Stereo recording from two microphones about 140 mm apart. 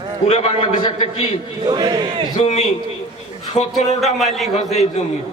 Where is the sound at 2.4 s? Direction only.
50° left (ahead or behind).